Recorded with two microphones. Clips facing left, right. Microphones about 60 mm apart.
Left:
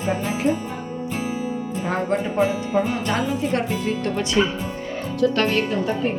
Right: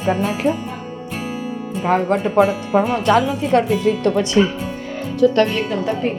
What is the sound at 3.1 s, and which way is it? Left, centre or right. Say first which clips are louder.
Speech: right 7 dB; right.